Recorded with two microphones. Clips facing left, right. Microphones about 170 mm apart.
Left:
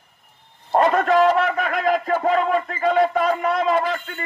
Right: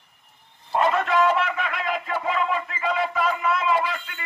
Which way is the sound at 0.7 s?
45° left (ahead or behind).